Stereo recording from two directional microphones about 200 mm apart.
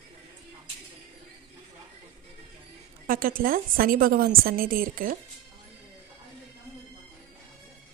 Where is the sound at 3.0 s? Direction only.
45° right (ahead or behind).